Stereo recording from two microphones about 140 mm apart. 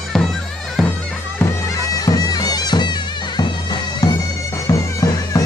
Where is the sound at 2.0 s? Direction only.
25° left (ahead or behind).